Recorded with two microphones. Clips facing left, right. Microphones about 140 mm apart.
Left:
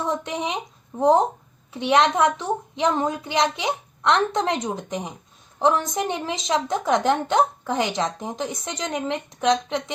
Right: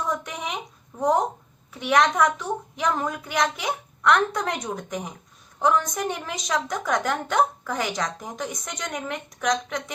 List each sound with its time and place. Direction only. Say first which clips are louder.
0.0 s a woman's voice: left 3 dB; 25° left (ahead or behind)